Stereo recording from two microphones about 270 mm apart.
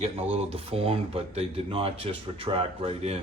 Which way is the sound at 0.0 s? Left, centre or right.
Right.